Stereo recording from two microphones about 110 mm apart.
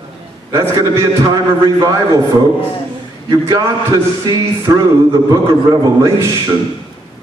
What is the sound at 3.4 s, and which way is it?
Music, 30° right (ahead or behind).